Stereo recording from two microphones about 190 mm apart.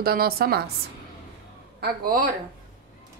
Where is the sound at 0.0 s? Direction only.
50° right (ahead or behind).